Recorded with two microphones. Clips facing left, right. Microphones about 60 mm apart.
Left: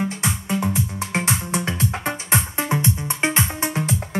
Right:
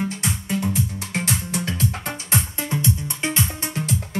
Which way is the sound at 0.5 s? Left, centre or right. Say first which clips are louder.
Even; left.